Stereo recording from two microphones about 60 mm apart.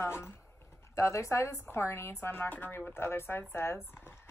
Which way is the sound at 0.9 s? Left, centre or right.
Left.